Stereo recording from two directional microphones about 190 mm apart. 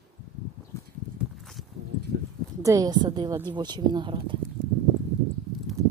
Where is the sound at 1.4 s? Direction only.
Centre (ahead or behind).